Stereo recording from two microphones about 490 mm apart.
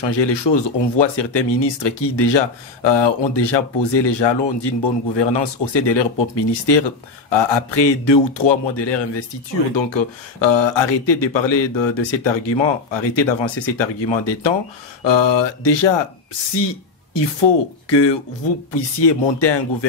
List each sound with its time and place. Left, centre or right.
0.0 s speech: left
10.4 s speech: left